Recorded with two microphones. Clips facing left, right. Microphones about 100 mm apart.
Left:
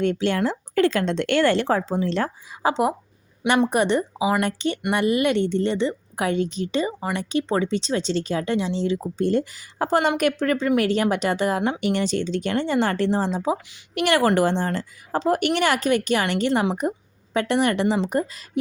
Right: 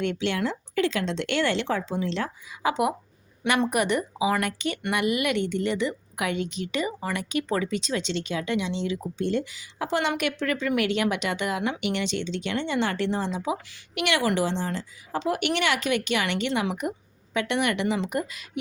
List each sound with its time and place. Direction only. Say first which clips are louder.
0.0 s speech: left 5 dB; 40° left (ahead or behind)
2.6 s speech: left 3 dB; 30° left (ahead or behind)
18.5 s a sound: left 8 dB; 35° left (ahead or behind)